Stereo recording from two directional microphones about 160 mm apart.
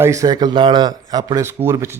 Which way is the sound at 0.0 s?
20° right (ahead or behind).